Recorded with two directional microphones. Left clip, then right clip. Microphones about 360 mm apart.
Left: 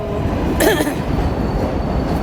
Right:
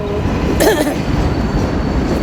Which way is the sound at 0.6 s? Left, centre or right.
Centre.